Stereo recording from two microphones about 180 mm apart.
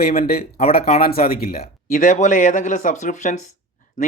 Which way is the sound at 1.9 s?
45° left (ahead or behind).